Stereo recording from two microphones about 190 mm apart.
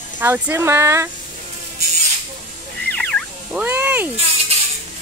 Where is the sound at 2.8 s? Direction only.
5° left (ahead or behind).